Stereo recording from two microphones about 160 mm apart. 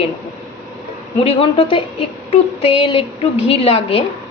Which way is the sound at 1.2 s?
35° left (ahead or behind).